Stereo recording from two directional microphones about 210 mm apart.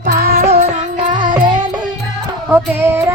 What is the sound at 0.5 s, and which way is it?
Music, 35° right (ahead or behind).